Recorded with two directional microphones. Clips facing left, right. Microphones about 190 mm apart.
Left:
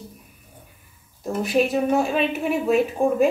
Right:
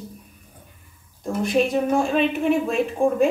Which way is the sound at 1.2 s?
5° left (ahead or behind).